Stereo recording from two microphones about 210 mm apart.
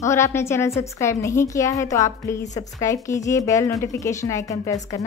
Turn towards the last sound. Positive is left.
turn(degrees=15)  # may be behind; listen again after turning